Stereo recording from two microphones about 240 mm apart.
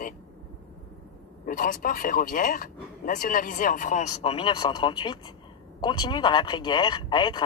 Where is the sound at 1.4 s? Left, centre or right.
Left.